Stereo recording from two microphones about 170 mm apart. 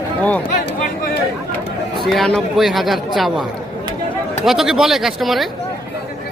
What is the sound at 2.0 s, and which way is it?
Speech, centre (ahead or behind).